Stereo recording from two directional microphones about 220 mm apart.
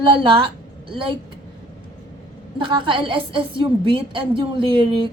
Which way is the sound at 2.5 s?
20° right (ahead or behind).